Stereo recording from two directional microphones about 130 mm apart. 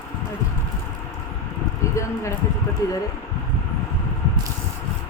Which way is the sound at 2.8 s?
25° left (ahead or behind).